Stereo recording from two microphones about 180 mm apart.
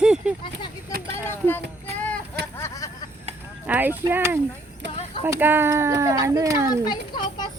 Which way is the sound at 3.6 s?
10° right (ahead or behind).